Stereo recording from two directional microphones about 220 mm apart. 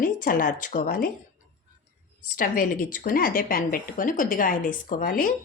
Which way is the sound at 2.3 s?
40° left (ahead or behind).